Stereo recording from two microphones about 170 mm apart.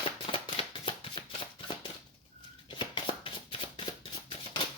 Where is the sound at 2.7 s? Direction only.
30° left (ahead or behind).